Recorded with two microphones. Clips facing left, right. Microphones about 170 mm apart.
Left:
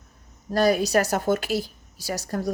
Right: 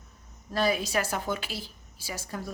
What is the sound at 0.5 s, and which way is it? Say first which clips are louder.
A woman's voice: left 7 dB; 40° left (ahead or behind).